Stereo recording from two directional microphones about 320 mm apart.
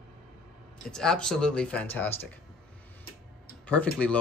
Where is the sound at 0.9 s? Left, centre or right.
Centre.